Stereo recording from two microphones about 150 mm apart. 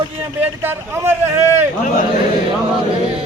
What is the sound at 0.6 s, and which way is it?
Speech, 15° right (ahead or behind).